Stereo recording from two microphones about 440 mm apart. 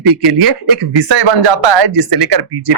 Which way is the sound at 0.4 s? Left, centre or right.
Right.